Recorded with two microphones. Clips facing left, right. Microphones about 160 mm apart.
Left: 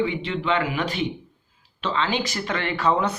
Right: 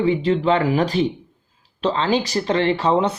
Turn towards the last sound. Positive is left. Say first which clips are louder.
# right 4 dB
turn(degrees=-30)  # may be behind; listen again after turning